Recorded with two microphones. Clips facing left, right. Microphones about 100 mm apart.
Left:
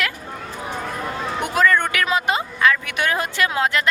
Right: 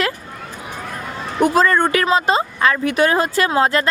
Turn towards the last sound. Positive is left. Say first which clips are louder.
# right 4 dB
turn(degrees=-35)  # may be behind; listen again after turning